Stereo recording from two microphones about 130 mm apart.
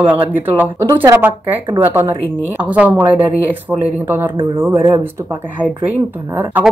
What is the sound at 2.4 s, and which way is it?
Speech, 10° right (ahead or behind).